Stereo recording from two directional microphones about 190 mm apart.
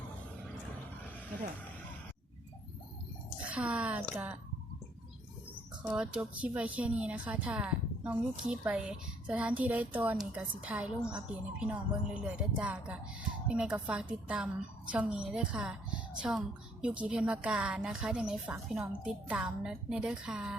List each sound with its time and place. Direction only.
3.5 s a woman's voice: 5° right (ahead or behind)
5.8 s a woman's voice: 5° right (ahead or behind)